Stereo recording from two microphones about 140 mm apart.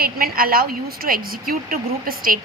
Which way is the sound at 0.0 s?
90° right.